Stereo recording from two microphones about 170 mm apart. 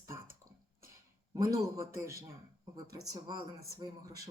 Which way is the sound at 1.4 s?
20° right (ahead or behind).